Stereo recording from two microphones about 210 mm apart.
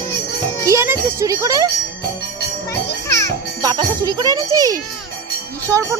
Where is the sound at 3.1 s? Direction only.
15° left (ahead or behind).